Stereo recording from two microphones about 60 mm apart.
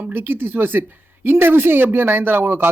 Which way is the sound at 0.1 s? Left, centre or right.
Right.